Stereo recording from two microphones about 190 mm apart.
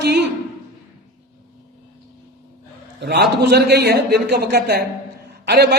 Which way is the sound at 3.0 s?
60° right (ahead or behind).